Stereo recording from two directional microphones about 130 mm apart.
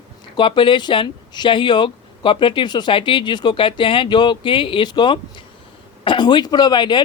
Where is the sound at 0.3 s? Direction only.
40° left (ahead or behind).